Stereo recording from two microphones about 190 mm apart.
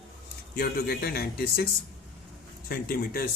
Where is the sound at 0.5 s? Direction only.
55° left (ahead or behind).